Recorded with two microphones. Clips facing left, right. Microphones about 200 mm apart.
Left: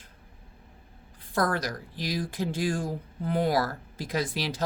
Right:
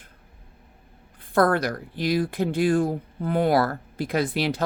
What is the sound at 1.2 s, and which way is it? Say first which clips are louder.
Speech: right 7 dB; 60° right (ahead or behind).